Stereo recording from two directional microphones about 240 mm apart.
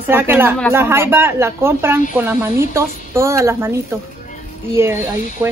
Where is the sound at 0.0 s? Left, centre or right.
Centre.